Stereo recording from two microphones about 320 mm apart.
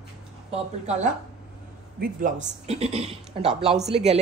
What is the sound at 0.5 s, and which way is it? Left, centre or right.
Speech, right.